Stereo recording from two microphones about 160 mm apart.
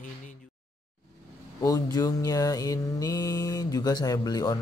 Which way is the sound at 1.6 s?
25° left (ahead or behind).